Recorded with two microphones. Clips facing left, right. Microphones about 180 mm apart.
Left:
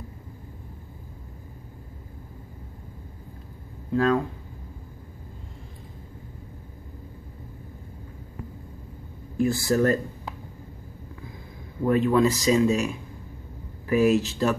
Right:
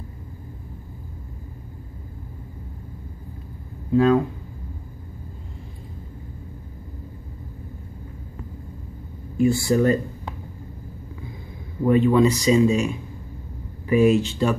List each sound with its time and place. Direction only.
3.9 s speech: 5° right (ahead or behind)
9.4 s speech: centre (ahead or behind)
11.8 s speech: centre (ahead or behind)